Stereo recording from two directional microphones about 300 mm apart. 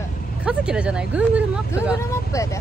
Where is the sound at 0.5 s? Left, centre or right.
Centre.